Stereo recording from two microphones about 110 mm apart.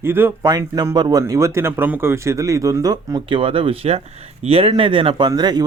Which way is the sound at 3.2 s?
55° right (ahead or behind).